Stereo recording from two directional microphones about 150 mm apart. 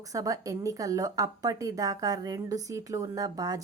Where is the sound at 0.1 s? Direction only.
25° right (ahead or behind).